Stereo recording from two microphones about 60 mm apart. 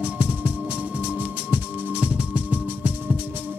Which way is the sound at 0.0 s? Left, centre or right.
Right.